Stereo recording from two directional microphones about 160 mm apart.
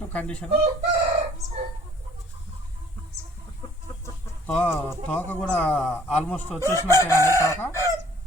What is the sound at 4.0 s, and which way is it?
Speech, 10° left (ahead or behind).